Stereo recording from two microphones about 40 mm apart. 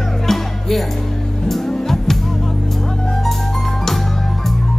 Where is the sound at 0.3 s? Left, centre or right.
Centre.